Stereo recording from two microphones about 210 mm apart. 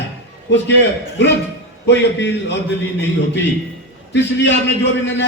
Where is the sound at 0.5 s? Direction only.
60° left (ahead or behind).